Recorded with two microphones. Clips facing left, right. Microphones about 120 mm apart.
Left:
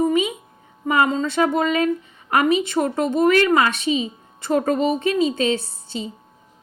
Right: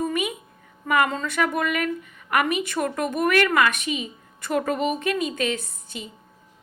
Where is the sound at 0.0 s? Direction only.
20° left (ahead or behind).